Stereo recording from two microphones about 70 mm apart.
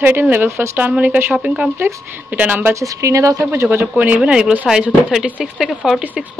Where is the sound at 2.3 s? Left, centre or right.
Right.